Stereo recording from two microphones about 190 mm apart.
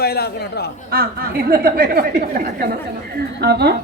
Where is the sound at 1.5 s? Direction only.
50° right (ahead or behind).